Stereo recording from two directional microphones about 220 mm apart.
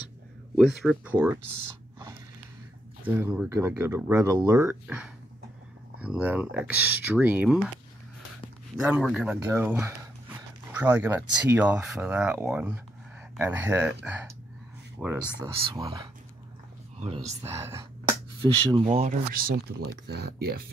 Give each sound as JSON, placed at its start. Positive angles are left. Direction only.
{"t": 0.6, "sound": "speech", "side_deg": -5}
{"t": 3.1, "sound": "speech", "side_deg": -10}
{"t": 8.8, "sound": "speech", "side_deg": -5}
{"t": 15.0, "sound": "speech", "side_deg": -10}
{"t": 17.4, "sound": "speech", "side_deg": -15}
{"t": 19.0, "sound": "speech", "side_deg": -40}